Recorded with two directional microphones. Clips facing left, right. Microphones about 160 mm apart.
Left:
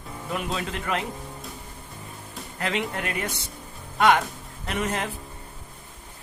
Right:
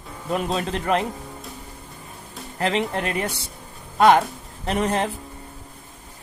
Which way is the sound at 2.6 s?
30° right (ahead or behind).